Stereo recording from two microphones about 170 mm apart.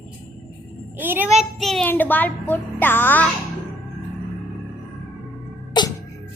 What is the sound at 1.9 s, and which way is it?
A child's voice, 10° left (ahead or behind).